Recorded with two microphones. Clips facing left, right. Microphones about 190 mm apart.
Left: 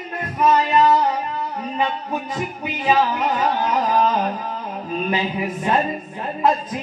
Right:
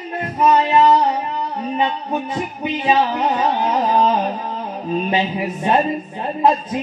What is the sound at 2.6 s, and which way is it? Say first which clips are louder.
Music: right 2 dB; 25° right (ahead or behind).